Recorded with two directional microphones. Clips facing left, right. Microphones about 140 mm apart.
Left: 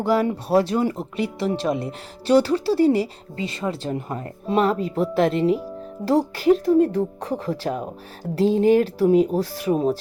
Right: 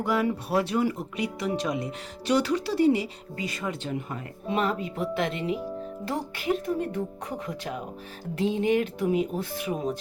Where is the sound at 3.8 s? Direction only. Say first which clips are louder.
Left 5 dB; 40° left (ahead or behind).